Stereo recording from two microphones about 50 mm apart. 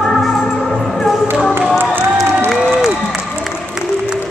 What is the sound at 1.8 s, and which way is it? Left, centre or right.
Run, right.